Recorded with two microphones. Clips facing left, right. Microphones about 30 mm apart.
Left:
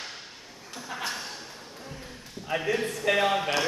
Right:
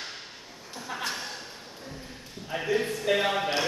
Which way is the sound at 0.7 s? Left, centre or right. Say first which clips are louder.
Even; centre.